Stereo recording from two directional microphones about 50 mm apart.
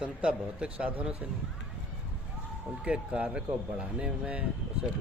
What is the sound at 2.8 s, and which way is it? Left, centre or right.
Speech, right.